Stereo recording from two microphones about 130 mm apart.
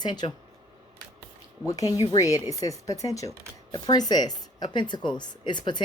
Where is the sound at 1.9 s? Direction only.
30° left (ahead or behind).